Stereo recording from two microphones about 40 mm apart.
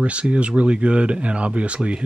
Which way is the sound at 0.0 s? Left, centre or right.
Right.